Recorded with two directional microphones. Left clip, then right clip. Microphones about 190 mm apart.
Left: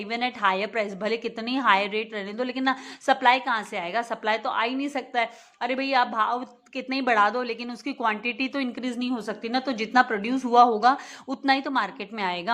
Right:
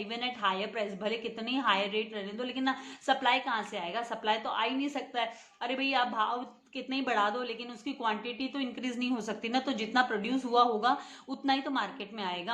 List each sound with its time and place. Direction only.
0.1 s a woman's voice: 40° left (ahead or behind)
8.8 s a woman's voice: 30° left (ahead or behind)